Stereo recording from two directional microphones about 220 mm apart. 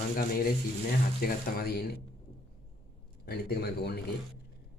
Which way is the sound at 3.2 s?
45° left (ahead or behind).